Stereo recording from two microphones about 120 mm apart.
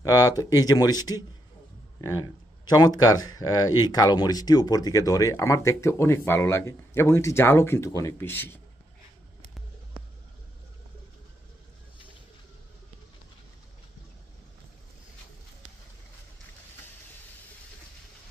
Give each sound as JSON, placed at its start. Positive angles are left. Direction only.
{"t": 0.0, "sound": "speech", "side_deg": 30}